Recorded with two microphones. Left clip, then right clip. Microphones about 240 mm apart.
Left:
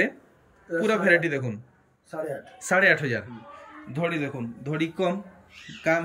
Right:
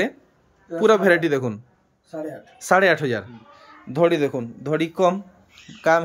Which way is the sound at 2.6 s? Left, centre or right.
Centre.